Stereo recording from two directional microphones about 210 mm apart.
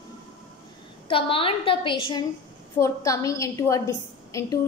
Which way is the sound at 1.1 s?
25° left (ahead or behind).